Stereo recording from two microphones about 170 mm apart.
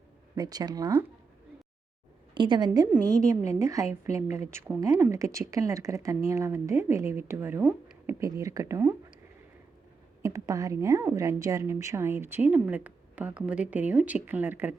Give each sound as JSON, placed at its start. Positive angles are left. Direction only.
{"t": 0.3, "sound": "speech", "side_deg": -20}
{"t": 2.3, "sound": "a woman's voice", "side_deg": -25}
{"t": 5.1, "sound": "a woman's voice", "side_deg": -20}
{"t": 10.2, "sound": "a woman's voice", "side_deg": -20}